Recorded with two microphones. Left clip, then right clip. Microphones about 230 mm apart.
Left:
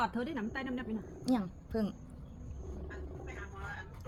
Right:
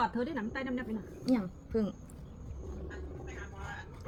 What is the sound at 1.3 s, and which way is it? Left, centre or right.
Speech, left.